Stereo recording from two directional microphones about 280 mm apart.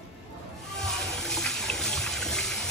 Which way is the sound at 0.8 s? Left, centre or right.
Centre.